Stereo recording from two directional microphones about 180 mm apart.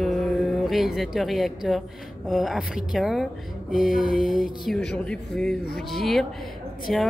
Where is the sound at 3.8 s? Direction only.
50° left (ahead or behind).